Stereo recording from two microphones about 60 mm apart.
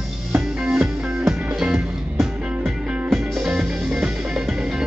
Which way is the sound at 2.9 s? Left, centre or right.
Centre.